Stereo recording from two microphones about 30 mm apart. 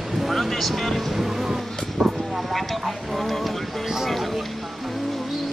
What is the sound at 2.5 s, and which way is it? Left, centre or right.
Speech, centre.